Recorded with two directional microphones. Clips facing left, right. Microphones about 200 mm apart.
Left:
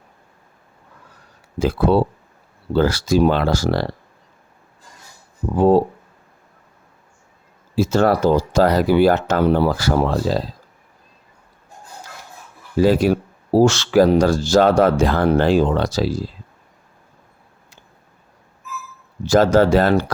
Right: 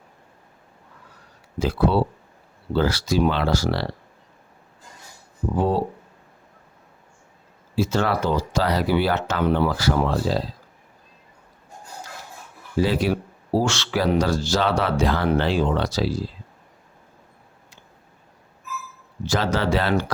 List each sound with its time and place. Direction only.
1.5 s speech: 50° left (ahead or behind)
7.8 s speech: 45° left (ahead or behind)
12.8 s speech: 45° left (ahead or behind)
19.2 s speech: 45° left (ahead or behind)